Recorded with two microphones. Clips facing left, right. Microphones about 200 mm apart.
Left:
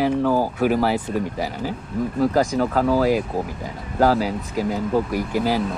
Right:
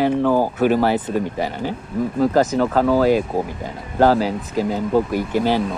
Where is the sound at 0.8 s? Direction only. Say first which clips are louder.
Right 3 dB; centre (ahead or behind).